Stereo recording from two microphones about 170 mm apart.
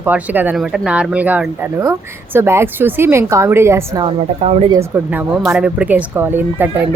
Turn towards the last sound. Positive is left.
turn(degrees=-10)  # may be behind; listen again after turning